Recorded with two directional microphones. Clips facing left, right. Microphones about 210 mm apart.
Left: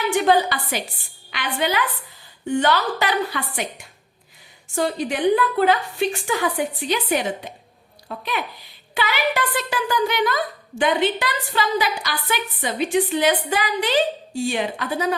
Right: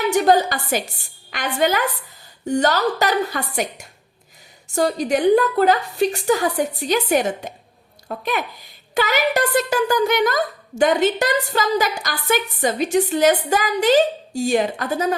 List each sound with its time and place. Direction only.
0.1 s a woman's voice: 40° right (ahead or behind)